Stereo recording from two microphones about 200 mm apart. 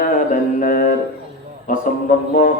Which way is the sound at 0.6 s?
45° left (ahead or behind).